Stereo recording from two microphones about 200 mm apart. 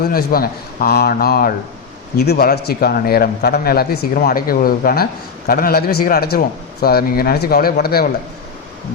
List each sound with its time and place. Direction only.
0.0 s a man's voice: 50° left (ahead or behind)